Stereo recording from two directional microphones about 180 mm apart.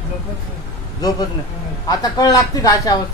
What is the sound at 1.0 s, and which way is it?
Speech, 20° left (ahead or behind).